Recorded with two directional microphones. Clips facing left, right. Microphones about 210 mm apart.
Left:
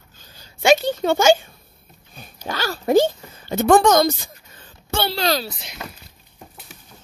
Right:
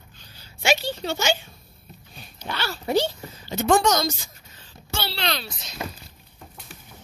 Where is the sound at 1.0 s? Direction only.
50° left (ahead or behind).